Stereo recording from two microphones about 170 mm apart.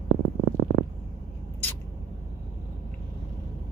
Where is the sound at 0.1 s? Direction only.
70° right (ahead or behind).